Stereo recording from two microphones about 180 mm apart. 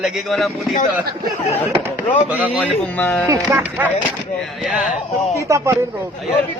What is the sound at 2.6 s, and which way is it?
Speech, 10° left (ahead or behind).